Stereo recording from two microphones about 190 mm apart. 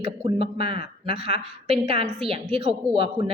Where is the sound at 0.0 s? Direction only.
30° right (ahead or behind).